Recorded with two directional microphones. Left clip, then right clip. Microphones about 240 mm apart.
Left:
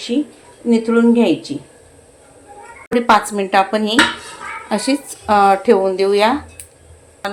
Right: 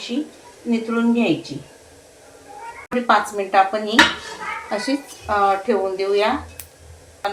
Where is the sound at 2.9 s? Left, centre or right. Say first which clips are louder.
Left 4 dB; left.